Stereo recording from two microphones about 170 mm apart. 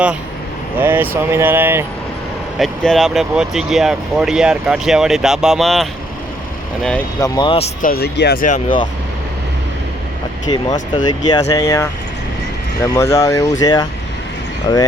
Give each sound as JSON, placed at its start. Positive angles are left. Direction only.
{"t": 0.8, "sound": "speech", "side_deg": -10}
{"t": 2.6, "sound": "speech", "side_deg": 0}
{"t": 7.2, "sound": "speech", "side_deg": 25}
{"t": 7.8, "sound": "speech", "side_deg": 60}
{"t": 8.4, "sound": "speech", "side_deg": 45}
{"t": 10.5, "sound": "speech", "side_deg": 30}